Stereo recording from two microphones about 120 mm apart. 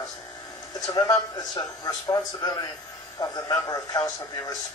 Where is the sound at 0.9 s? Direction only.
30° left (ahead or behind).